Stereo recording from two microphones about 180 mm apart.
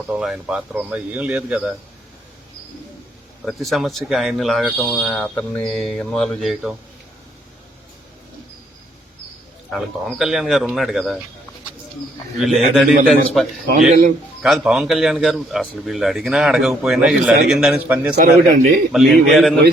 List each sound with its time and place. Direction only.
0.1 s speech: 5° right (ahead or behind)
3.4 s speech: centre (ahead or behind)
9.7 s speech: centre (ahead or behind)
12.4 s speech: centre (ahead or behind)
14.4 s speech: centre (ahead or behind)
18.2 s speech: 55° right (ahead or behind)
18.9 s speech: centre (ahead or behind)